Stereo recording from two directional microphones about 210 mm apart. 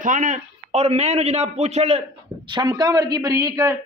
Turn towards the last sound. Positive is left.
turn(degrees=-15)  # may be behind; listen again after turning